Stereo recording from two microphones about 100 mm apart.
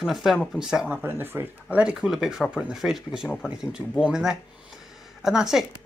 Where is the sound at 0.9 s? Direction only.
20° right (ahead or behind).